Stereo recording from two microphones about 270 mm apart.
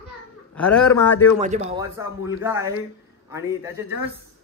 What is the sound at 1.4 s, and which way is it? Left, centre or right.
Speech, right.